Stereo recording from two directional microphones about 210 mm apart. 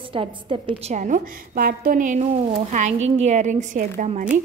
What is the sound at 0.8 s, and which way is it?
A woman's voice, 35° right (ahead or behind).